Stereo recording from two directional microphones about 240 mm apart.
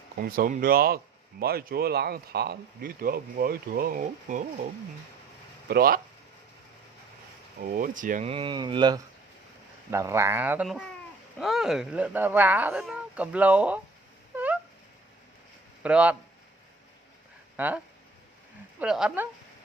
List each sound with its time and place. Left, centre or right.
0.2 s speech: right
5.6 s speech: right
7.6 s speech: right; by 13.8 s centre
14.3 s a sound: centre
15.8 s speech: centre
18.8 s speech: centre